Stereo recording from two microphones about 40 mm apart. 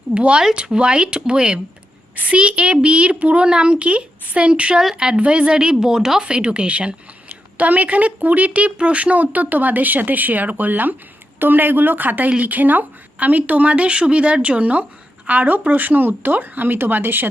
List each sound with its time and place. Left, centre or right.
0.1 s a woman's voice: right
6.3 s a woman's voice: right